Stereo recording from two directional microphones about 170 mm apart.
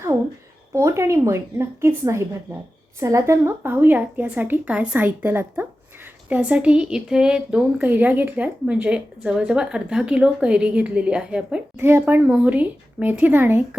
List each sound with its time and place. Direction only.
0.7 s speech: 15° right (ahead or behind)